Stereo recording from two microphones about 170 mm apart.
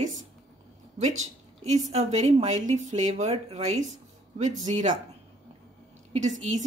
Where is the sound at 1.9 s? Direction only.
40° right (ahead or behind).